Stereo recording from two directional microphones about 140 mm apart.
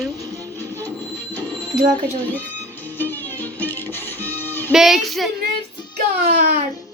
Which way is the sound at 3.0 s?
15° left (ahead or behind).